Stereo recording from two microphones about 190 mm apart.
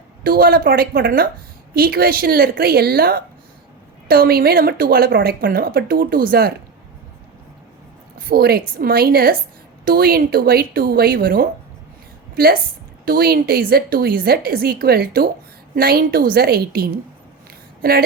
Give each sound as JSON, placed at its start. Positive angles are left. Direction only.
{"t": 0.2, "sound": "a woman's voice", "side_deg": -50}
{"t": 8.3, "sound": "a woman's voice", "side_deg": -55}
{"t": 13.1, "sound": "a woman's voice", "side_deg": -50}